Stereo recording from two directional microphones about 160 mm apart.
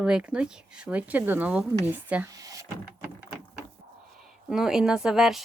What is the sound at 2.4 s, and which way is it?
Door, 20° right (ahead or behind).